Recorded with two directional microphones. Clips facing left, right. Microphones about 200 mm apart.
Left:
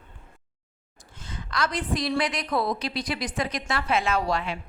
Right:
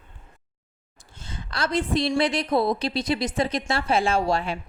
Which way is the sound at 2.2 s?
25° right (ahead or behind).